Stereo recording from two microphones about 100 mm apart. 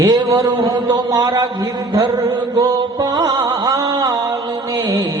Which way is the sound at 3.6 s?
35° right (ahead or behind).